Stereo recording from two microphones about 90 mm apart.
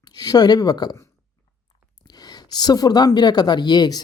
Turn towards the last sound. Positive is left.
turn(degrees=50)  # may be behind; listen again after turning